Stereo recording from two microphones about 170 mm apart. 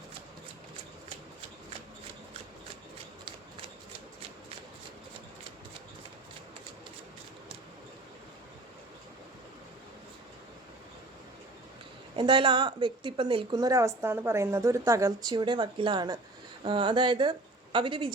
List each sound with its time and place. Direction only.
12.1 s a woman's voice: 30° right (ahead or behind)